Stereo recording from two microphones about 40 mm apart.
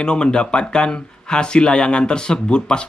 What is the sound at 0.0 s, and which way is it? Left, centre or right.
Speech, left.